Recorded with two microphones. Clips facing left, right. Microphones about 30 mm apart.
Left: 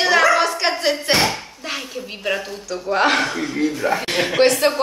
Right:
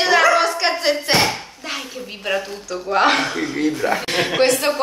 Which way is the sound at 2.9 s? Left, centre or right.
Centre.